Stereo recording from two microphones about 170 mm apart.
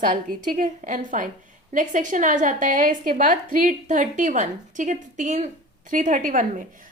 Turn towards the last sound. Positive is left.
turn(degrees=-50)  # may be behind; listen again after turning